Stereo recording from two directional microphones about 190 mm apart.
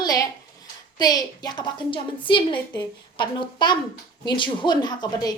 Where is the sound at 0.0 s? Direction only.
20° left (ahead or behind).